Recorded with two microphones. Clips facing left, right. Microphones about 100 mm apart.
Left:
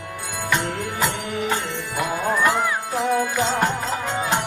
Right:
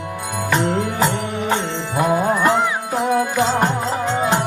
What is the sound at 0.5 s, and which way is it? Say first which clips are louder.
Music: right 5 dB; 30° right (ahead or behind).